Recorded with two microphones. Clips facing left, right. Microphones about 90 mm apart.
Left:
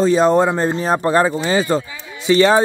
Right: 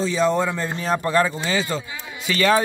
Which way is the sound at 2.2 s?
25° left (ahead or behind).